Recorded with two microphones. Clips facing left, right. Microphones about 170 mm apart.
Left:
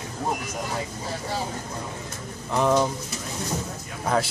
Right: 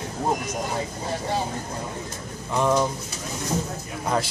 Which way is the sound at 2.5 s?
Centre (ahead or behind).